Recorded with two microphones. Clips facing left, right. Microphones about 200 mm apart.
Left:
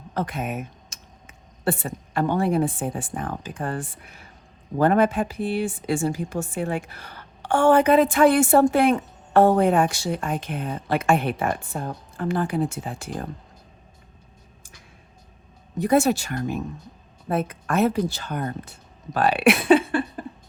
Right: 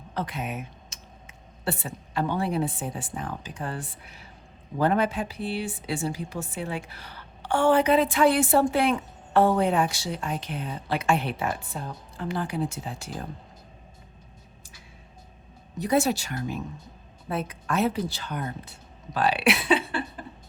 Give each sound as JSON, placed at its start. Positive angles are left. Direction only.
{"t": 0.1, "sound": "speech", "side_deg": 50}
{"t": 15.8, "sound": "speech", "side_deg": 50}